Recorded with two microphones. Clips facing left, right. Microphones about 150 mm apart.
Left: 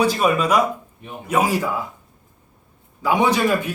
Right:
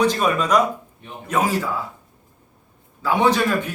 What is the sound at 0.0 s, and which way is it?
A man's voice, 10° left (ahead or behind).